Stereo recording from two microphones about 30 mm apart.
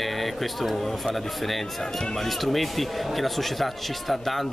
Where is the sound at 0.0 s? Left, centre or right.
Centre.